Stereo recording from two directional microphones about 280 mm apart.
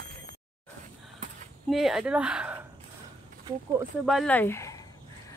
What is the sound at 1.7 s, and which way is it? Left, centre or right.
Speech, centre.